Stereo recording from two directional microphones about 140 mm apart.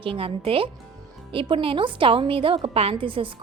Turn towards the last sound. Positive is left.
turn(degrees=-40)  # may be behind; listen again after turning